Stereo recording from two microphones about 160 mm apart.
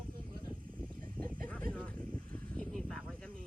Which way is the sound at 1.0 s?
10° left (ahead or behind).